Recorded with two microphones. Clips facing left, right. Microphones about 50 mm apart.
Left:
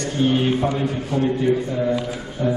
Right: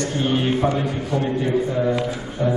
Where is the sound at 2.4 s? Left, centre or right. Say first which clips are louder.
Even; centre.